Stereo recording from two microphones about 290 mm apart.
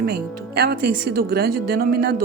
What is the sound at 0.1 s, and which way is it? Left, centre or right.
A woman's voice, right.